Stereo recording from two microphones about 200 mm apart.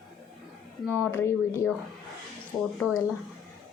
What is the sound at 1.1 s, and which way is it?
Speech, 15° left (ahead or behind).